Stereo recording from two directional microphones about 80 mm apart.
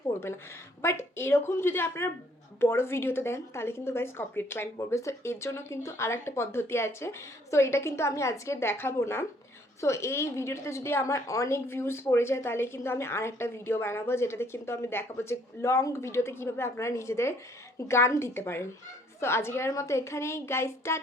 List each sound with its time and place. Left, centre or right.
0.8 s a woman's voice: left